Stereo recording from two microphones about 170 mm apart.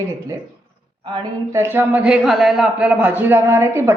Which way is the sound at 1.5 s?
15° right (ahead or behind).